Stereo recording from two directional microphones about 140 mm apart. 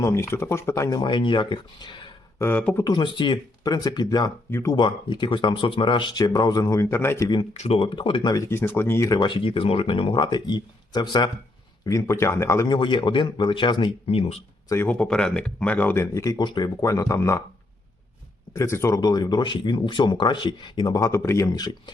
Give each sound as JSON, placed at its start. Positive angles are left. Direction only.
{"t": 0.0, "sound": "speech", "side_deg": 20}
{"t": 2.4, "sound": "speech", "side_deg": 15}
{"t": 2.8, "sound": "speech", "side_deg": 30}
{"t": 4.8, "sound": "speech", "side_deg": 35}
{"t": 7.5, "sound": "speech", "side_deg": 50}
{"t": 9.0, "sound": "speech", "side_deg": 30}
{"t": 12.7, "sound": "speech", "side_deg": 35}
{"t": 14.7, "sound": "speech", "side_deg": 15}
{"t": 18.5, "sound": "speech", "side_deg": 20}